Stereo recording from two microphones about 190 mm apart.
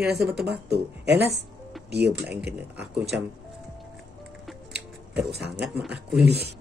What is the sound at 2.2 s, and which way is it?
Speech, 5° right (ahead or behind).